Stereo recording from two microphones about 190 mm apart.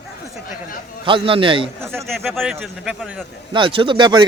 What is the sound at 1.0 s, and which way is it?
Speech, 25° right (ahead or behind).